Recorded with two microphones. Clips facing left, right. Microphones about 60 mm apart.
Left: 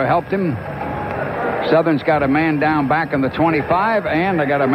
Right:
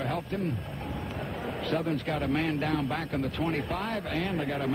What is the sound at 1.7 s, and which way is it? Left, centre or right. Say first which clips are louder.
Speech: left 16 dB; left.